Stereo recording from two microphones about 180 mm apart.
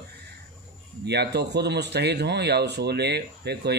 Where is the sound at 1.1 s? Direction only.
70° right (ahead or behind).